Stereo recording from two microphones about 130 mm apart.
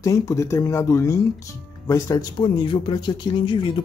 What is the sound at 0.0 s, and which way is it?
Speech, 25° left (ahead or behind).